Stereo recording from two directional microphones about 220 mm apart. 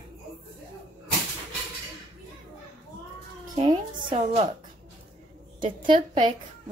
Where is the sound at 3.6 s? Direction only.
20° right (ahead or behind).